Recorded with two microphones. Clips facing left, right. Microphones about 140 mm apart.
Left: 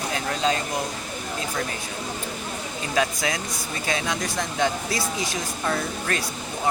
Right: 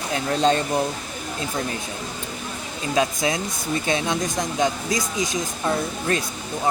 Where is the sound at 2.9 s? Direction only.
25° right (ahead or behind).